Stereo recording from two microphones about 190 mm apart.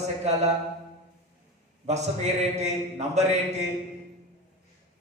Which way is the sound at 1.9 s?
35° right (ahead or behind).